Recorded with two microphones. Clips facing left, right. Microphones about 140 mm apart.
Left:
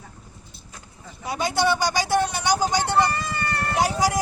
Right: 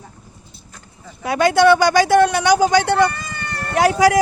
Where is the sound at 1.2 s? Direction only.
65° right (ahead or behind).